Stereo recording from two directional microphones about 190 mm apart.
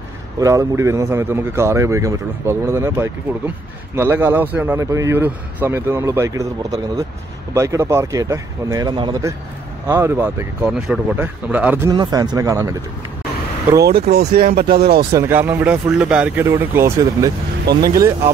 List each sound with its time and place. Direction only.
0.4 s speech: 15° right (ahead or behind)
11.9 s speech: 20° right (ahead or behind)
13.8 s speech: 55° right (ahead or behind)
15.1 s speech: 10° right (ahead or behind)